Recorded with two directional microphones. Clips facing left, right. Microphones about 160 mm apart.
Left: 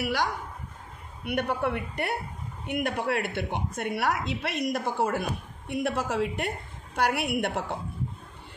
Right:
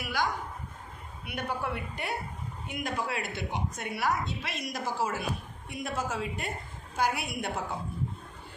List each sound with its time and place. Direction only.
0.0 s a woman's voice: 70° left (ahead or behind)